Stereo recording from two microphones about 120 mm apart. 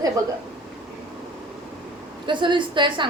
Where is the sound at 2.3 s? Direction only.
40° right (ahead or behind).